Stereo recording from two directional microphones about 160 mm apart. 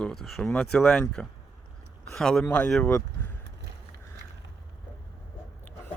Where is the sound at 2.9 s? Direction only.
15° left (ahead or behind).